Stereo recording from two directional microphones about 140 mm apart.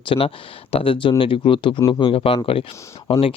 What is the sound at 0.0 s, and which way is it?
Speech, 40° left (ahead or behind).